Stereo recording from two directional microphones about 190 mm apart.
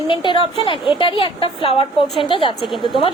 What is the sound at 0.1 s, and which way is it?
A woman's voice, 25° left (ahead or behind).